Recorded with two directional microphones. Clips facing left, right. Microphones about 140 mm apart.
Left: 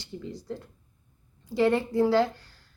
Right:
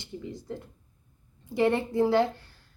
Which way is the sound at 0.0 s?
20° right (ahead or behind).